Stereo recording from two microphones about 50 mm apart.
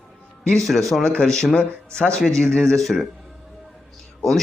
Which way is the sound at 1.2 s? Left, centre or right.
Centre.